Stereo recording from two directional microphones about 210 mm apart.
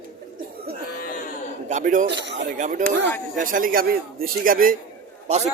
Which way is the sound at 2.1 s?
55° right (ahead or behind).